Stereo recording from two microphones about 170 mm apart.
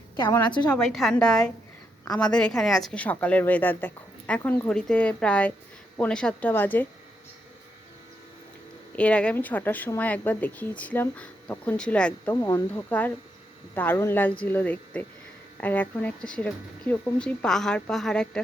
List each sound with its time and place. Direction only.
0.2 s a woman's voice: 20° left (ahead or behind)
0.7 s speech: 5° left (ahead or behind)
9.0 s speech: 5° left (ahead or behind)